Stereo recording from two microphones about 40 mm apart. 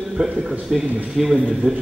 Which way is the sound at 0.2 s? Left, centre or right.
Centre.